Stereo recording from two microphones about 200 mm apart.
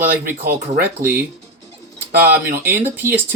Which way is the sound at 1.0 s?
15° right (ahead or behind).